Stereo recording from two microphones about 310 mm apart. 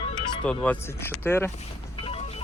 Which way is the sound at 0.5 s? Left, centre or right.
Centre.